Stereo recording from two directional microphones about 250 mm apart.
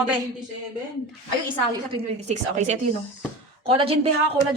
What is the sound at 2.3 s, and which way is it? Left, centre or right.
A woman's voice, right.